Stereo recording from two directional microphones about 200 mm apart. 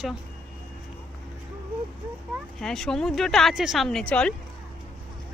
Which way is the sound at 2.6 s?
5° left (ahead or behind).